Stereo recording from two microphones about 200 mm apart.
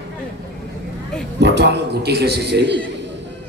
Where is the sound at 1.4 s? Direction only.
55° right (ahead or behind).